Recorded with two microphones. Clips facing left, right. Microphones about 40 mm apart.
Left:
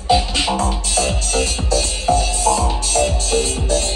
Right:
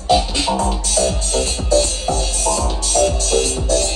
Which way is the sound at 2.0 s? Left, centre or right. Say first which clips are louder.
Left 4 dB; left.